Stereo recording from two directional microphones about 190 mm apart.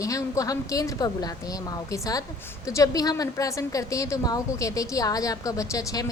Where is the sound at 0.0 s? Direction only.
15° left (ahead or behind).